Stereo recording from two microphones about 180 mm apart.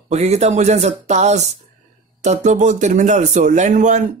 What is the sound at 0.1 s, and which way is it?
A man's voice, 35° right (ahead or behind).